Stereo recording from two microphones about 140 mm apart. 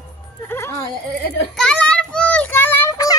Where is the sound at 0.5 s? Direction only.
20° left (ahead or behind).